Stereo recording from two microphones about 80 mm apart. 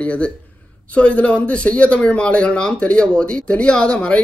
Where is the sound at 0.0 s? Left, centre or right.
Centre.